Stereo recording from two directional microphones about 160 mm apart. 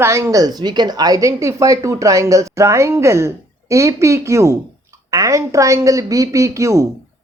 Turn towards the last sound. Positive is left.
turn(degrees=-20)  # may be behind; listen again after turning